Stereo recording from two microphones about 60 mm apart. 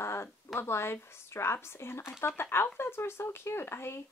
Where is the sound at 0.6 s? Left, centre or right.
Left.